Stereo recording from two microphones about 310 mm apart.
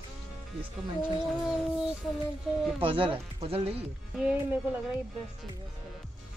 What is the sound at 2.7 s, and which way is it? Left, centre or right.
Speech, centre.